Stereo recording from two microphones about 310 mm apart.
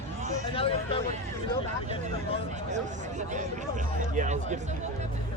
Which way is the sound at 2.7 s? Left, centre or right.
Right.